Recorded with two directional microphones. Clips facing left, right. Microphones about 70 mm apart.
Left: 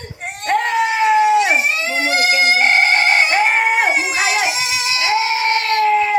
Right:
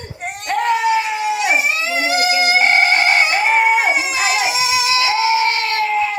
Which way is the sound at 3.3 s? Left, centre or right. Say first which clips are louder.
Right 1 dB; left.